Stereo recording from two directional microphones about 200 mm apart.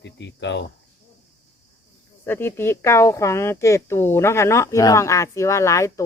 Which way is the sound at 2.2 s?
10° left (ahead or behind).